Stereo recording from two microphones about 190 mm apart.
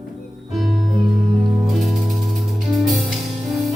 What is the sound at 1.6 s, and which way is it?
Music, centre (ahead or behind).